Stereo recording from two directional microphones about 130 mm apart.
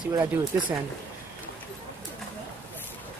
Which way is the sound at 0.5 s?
20° right (ahead or behind).